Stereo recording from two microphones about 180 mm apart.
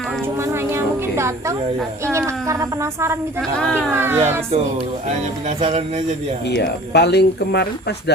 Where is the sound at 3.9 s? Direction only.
15° right (ahead or behind).